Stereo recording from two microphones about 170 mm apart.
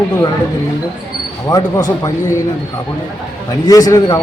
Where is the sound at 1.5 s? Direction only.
20° left (ahead or behind).